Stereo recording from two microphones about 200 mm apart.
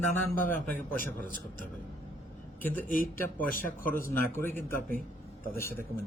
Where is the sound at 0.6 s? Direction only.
10° left (ahead or behind).